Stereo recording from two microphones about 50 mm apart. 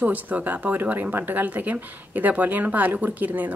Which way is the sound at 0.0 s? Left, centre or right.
Right.